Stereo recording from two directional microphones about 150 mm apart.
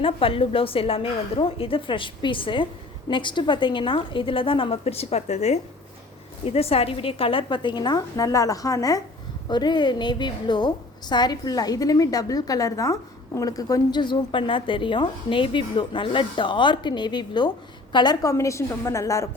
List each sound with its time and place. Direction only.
0.0 s a woman's voice: 40° left (ahead or behind); by 19.3 s 20° left (ahead or behind)